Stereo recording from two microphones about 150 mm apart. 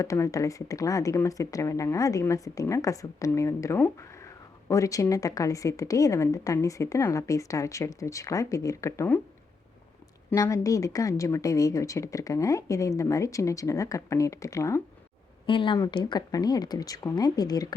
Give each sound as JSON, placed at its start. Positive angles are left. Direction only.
{"t": 0.0, "sound": "a woman's voice", "side_deg": 20}
{"t": 10.3, "sound": "a woman's voice", "side_deg": 20}
{"t": 15.4, "sound": "a woman's voice", "side_deg": 35}